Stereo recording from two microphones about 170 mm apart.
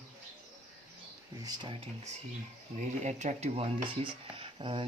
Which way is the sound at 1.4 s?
30° right (ahead or behind).